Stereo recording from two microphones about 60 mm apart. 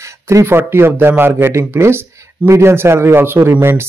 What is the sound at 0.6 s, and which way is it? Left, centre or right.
A man's voice, right.